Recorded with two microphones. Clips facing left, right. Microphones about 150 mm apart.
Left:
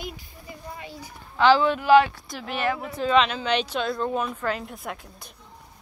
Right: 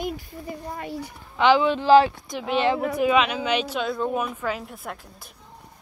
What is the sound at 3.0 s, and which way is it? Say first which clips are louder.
Speech: right 1 dB; 10° right (ahead or behind).